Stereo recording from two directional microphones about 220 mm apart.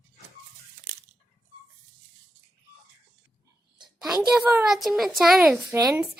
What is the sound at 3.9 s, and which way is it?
A woman's voice, centre (ahead or behind).